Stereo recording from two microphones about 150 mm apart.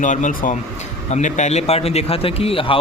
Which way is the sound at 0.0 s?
55° left (ahead or behind).